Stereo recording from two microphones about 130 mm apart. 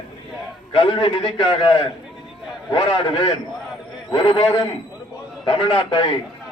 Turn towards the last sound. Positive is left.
turn(degrees=40)  # may be behind; listen again after turning